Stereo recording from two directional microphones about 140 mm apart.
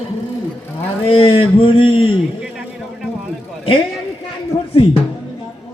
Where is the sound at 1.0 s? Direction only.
40° left (ahead or behind).